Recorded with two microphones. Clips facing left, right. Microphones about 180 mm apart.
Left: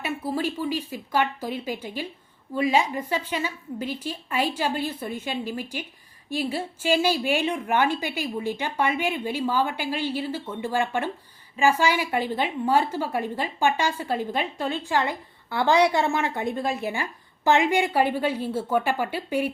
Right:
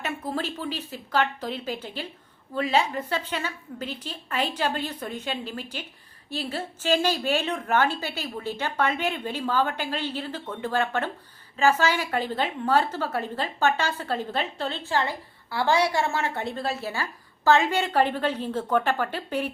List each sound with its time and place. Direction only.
0.0 s a woman's voice: 10° left (ahead or behind)